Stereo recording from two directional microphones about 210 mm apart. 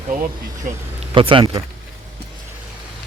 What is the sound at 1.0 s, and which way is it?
Speech, 25° right (ahead or behind).